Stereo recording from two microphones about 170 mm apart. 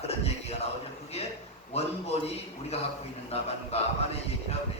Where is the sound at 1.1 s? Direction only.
35° left (ahead or behind).